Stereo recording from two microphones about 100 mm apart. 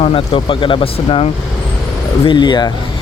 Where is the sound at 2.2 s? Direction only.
50° left (ahead or behind).